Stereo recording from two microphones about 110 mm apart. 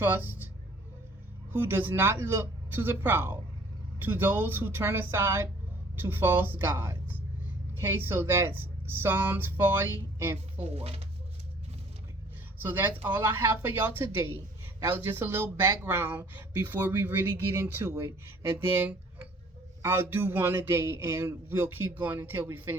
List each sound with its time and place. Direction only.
0.0 s speech: 20° right (ahead or behind)
1.5 s speech: 20° right (ahead or behind)
10.6 s speech: 65° right (ahead or behind)
12.5 s speech: 20° right (ahead or behind)